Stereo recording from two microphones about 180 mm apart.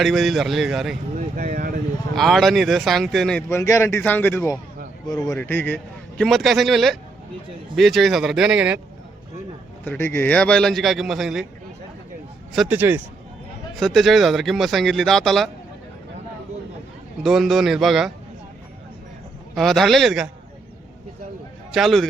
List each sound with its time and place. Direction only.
0.0 s speech: centre (ahead or behind)
1.4 s speech: 50° right (ahead or behind)
2.1 s speech: centre (ahead or behind)
3.5 s a man's voice: 15° left (ahead or behind)
5.4 s speech: 10° left (ahead or behind); by 8.8 s 5° right (ahead or behind)
9.8 s speech: 10° left (ahead or behind)
12.5 s speech: 10° right (ahead or behind)
13.7 s speech: centre (ahead or behind)
17.2 s speech: centre (ahead or behind)
19.5 s speech: centre (ahead or behind)
21.7 s a man's voice: centre (ahead or behind)